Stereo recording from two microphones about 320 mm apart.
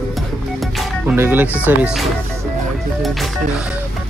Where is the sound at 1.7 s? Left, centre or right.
Centre.